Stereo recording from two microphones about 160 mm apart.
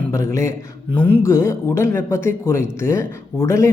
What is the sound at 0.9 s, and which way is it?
Speech, 10° left (ahead or behind).